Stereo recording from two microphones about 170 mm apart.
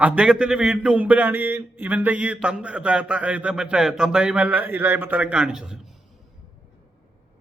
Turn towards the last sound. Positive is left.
turn(degrees=0)  # may be behind; listen again after turning